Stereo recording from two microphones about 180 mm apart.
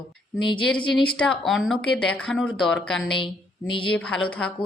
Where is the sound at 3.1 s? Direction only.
25° left (ahead or behind).